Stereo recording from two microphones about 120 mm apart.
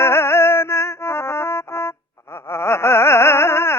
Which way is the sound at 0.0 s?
20° left (ahead or behind).